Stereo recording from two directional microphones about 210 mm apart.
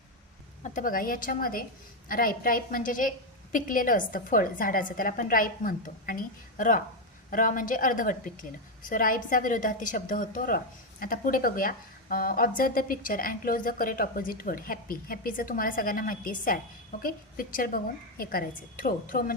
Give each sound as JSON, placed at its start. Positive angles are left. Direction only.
{"t": 0.6, "sound": "a woman's voice", "side_deg": 40}